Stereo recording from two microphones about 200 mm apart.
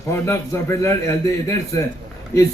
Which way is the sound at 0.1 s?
15° left (ahead or behind).